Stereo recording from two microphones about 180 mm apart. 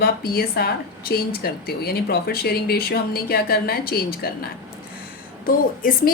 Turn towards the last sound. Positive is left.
turn(degrees=50)  # may be behind; listen again after turning